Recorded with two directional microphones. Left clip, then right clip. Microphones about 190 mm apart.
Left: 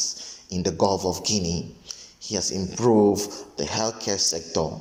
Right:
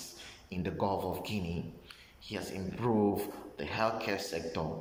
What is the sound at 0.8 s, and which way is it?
Speech, 35° left (ahead or behind).